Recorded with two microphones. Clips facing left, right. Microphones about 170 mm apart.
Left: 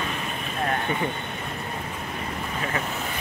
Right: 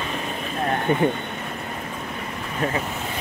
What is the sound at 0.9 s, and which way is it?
Speech, 50° right (ahead or behind).